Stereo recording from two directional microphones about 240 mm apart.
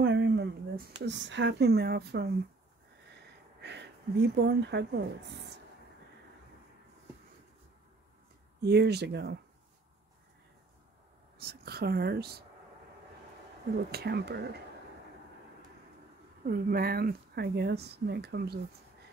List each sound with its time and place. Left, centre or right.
0.0 s a sound: right
1.0 s speech: right
3.6 s speech: right
8.6 s speech: right
11.3 s speech: right
13.9 s speech: right
16.4 s speech: right